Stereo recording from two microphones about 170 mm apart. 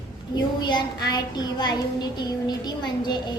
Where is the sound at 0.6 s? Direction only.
25° left (ahead or behind).